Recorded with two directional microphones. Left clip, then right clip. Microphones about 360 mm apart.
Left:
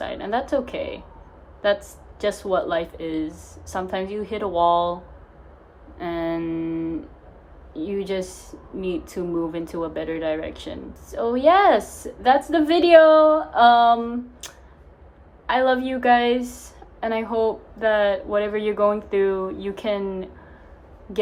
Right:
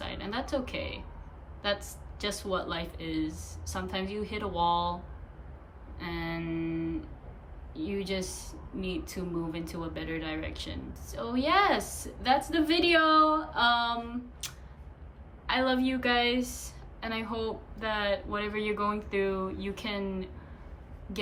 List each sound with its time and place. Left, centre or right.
0.0 s a woman's voice: centre
2.5 s speech: centre
6.0 s speech: centre
6.5 s a sound: left
7.7 s speech: centre
15.4 s speech: centre